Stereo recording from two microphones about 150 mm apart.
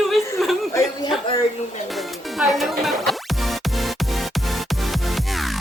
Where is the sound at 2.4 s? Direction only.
Centre (ahead or behind).